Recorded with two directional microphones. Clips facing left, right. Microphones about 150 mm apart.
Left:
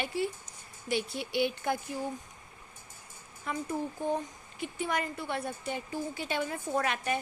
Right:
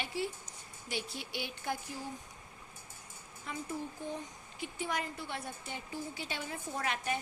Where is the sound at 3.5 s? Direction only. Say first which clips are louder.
Left 6 dB; 60° left (ahead or behind).